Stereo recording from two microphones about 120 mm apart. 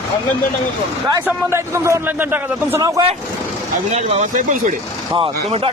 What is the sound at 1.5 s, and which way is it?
A man's voice, 25° right (ahead or behind).